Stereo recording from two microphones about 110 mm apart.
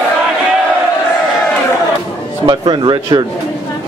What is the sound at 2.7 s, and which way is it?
Speech, 45° right (ahead or behind).